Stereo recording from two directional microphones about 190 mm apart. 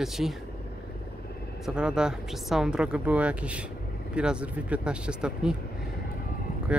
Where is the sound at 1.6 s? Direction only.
5° right (ahead or behind).